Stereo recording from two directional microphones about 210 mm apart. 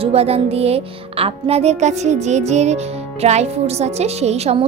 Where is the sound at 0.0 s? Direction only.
30° right (ahead or behind).